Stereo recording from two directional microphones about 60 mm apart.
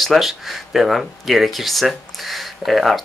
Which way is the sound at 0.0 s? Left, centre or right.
Centre.